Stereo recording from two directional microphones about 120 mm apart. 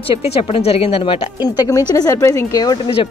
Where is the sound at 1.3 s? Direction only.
35° left (ahead or behind).